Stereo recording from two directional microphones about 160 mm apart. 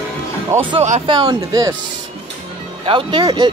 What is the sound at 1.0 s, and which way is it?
Speech, 30° right (ahead or behind).